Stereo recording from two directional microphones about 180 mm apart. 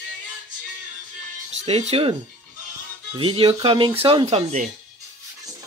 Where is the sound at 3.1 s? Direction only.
30° right (ahead or behind).